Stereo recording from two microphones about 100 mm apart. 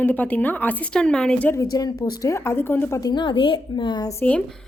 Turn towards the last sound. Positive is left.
turn(degrees=10)  # may be behind; listen again after turning